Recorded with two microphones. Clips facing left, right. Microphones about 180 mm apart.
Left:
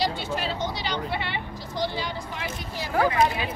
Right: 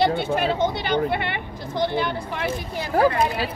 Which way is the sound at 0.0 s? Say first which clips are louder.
Right 7 dB; 55° right (ahead or behind).